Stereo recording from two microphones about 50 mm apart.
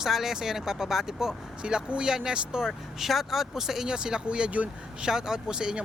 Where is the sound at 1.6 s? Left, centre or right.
Centre.